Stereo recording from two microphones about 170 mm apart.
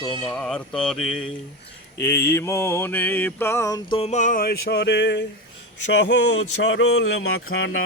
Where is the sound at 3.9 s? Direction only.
40° left (ahead or behind); by 7.8 s 90° left.